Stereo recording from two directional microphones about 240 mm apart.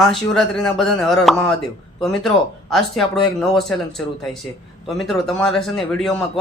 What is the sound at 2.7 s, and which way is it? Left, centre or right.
Speech, centre.